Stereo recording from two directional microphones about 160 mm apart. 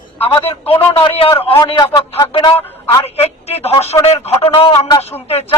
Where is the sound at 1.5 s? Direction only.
25° left (ahead or behind).